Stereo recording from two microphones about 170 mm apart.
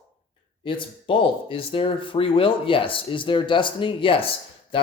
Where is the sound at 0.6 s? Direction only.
30° left (ahead or behind).